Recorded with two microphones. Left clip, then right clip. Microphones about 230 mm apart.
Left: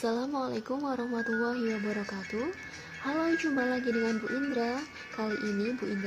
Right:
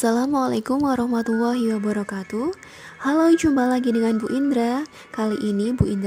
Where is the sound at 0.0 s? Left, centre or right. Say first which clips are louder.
Right 11 dB; right.